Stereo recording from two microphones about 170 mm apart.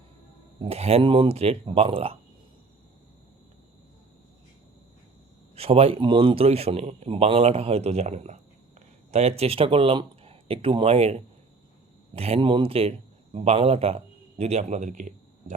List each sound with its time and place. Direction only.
0.6 s speech: 35° right (ahead or behind)
5.5 s a man's voice: 35° right (ahead or behind)